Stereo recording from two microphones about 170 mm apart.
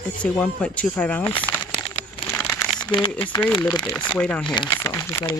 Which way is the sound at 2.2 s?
15° left (ahead or behind).